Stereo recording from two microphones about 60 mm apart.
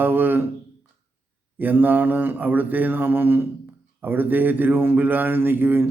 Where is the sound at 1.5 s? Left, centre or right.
Right.